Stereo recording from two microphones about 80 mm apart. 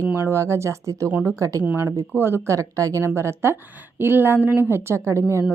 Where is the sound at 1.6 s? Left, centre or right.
Right.